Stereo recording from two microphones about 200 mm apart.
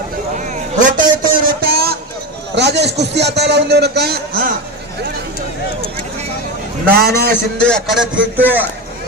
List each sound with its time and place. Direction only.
0.3 s a sound: 40° right (ahead or behind)
2.6 s a man's voice: 60° right (ahead or behind)
6.9 s a man's voice: 50° right (ahead or behind)
7.7 s speech: centre (ahead or behind)